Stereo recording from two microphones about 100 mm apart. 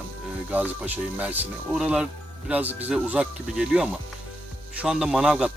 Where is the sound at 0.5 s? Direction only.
15° right (ahead or behind).